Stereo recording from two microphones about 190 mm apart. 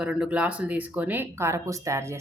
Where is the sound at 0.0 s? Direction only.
5° right (ahead or behind).